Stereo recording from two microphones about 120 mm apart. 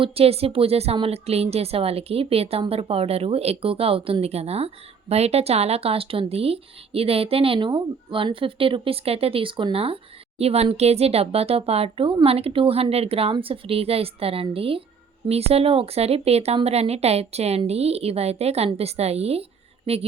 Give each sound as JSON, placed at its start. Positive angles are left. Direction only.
{"t": 0.0, "sound": "a woman's voice", "side_deg": -55}